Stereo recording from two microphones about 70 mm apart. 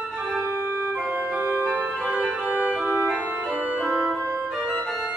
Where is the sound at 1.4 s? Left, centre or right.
Right.